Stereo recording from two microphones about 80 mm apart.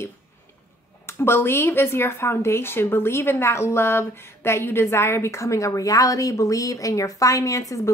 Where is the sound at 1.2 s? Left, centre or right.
Left.